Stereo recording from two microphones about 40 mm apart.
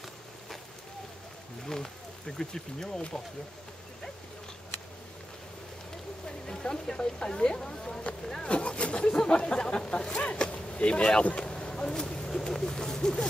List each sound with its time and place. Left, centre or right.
1.7 s speech: centre
6.4 s speech: centre
8.5 s speech: left